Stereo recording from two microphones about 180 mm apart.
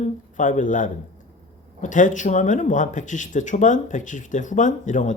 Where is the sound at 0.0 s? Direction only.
45° left (ahead or behind).